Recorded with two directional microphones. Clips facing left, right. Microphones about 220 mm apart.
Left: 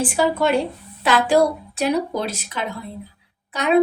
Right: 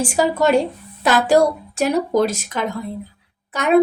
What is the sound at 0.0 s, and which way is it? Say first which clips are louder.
Speech: right 2 dB; 45° right (ahead or behind).